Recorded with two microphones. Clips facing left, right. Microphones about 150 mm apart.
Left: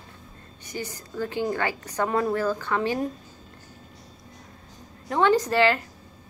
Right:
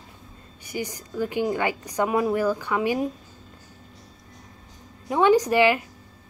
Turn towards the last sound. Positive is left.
turn(degrees=-15)  # may be behind; listen again after turning